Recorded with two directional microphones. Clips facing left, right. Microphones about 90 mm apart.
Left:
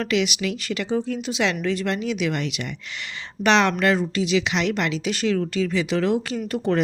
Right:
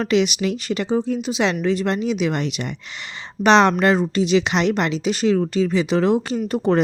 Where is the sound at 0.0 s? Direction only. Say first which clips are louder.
Right 4 dB; 30° right (ahead or behind).